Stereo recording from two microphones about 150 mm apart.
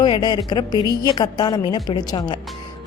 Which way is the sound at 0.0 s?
30° left (ahead or behind).